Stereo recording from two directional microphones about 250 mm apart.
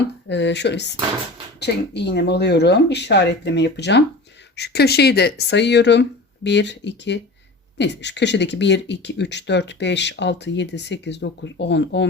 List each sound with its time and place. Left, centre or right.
0.3 s speech: left